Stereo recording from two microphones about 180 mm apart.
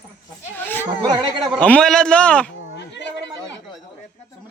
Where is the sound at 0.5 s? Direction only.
10° left (ahead or behind).